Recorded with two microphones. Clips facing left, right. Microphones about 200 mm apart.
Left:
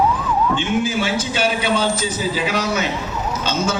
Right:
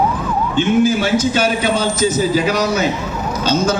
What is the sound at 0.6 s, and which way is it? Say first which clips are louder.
A man's voice: right 6 dB; 40° right (ahead or behind).